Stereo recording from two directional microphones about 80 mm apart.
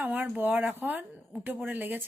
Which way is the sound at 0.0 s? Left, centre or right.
Right.